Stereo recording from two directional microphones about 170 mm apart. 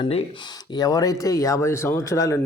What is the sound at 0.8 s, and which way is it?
Speech, 20° left (ahead or behind).